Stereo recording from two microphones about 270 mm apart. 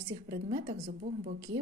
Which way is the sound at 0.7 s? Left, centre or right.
Right.